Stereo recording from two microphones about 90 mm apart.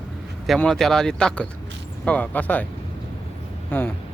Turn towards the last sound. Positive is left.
turn(degrees=20)  # may be behind; listen again after turning